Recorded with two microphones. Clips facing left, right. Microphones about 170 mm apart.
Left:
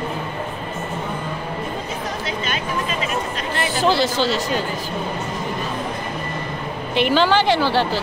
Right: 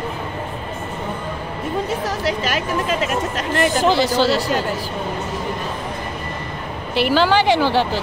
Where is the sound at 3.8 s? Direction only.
15° right (ahead or behind).